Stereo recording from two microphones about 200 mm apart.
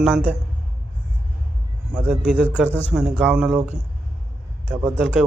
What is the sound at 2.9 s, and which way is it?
Speech, 5° right (ahead or behind).